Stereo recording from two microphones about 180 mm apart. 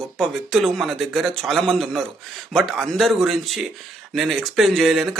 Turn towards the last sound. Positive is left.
turn(degrees=0)  # may be behind; listen again after turning